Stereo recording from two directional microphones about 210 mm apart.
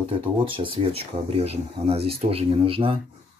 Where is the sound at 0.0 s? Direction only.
25° right (ahead or behind).